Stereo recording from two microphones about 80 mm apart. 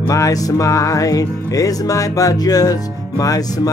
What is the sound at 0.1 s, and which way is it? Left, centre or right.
Music, left.